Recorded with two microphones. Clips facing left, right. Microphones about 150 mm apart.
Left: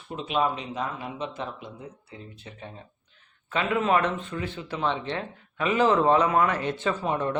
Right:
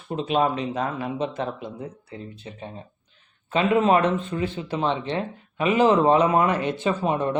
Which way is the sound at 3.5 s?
25° right (ahead or behind).